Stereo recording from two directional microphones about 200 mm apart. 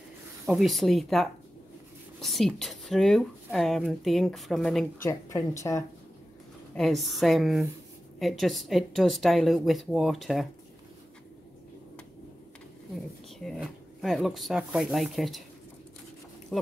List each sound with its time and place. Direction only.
0.5 s speech: centre (ahead or behind)
4.9 s speech: 15° left (ahead or behind)
6.7 s speech: centre (ahead or behind)
13.4 s speech: centre (ahead or behind)